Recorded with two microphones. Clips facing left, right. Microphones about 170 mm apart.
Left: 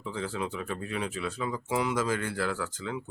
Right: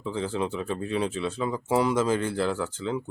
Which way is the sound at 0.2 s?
30° right (ahead or behind).